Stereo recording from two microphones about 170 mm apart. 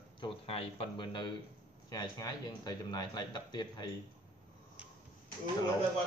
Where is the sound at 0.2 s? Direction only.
35° left (ahead or behind).